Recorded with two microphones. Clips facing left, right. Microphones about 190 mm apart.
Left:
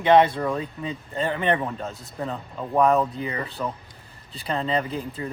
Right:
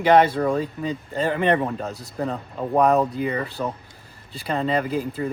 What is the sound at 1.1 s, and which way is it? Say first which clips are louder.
Speech: right 3 dB; centre (ahead or behind).